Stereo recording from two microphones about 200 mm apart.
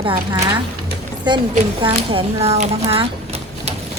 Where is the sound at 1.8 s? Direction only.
30° right (ahead or behind).